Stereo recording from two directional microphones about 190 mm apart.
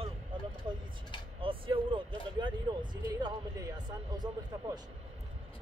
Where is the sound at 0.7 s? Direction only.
25° right (ahead or behind).